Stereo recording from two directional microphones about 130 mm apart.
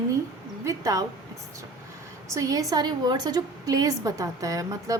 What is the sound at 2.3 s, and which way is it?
A woman's voice, 25° right (ahead or behind).